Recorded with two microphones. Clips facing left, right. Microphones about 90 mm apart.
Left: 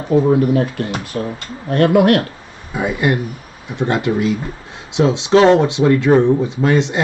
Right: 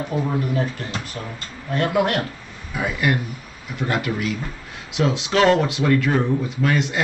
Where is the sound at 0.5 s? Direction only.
80° left.